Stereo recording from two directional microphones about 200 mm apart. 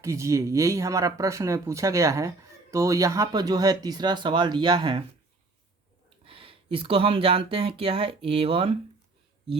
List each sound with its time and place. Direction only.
0.0 s speech: 15° right (ahead or behind)
6.2 s speech: 25° right (ahead or behind)